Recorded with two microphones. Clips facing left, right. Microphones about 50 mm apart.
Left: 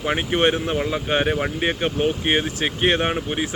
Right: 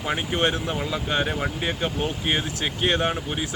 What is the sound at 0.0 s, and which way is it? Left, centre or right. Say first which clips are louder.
Speech: left 4 dB; left.